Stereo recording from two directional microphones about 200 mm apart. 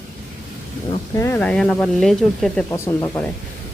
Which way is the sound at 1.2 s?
10° left (ahead or behind).